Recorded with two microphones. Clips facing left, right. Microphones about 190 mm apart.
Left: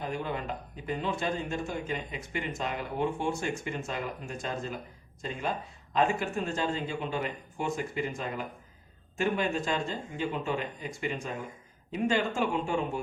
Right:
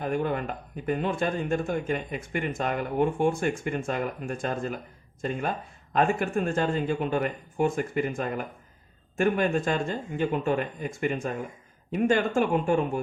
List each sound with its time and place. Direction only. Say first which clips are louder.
0.0 s speech: right 6 dB; 50° right (ahead or behind)